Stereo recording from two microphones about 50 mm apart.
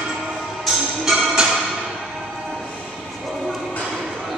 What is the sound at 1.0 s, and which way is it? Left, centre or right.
Music, centre.